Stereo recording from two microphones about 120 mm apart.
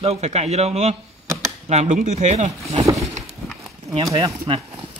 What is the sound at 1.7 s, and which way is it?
Speech, 80° right.